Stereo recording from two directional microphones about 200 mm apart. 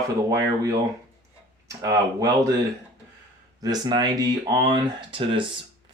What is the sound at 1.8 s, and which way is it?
Speech, 15° right (ahead or behind).